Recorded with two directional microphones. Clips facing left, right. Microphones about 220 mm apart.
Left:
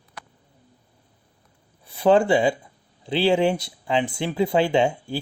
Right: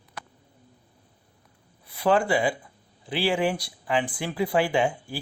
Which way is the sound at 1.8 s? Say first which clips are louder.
Left 5 dB; 25° left (ahead or behind).